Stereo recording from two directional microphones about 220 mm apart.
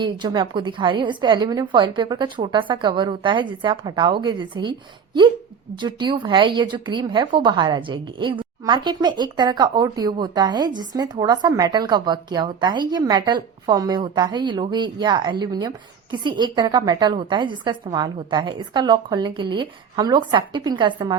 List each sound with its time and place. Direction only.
0.0 s a woman's voice: 20° right (ahead or behind)
5.8 s a woman's voice: 20° right (ahead or behind)